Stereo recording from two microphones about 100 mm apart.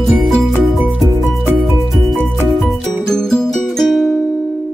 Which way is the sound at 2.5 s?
5° left (ahead or behind).